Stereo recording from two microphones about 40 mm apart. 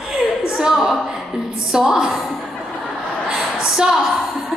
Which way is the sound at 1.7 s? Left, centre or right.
Centre.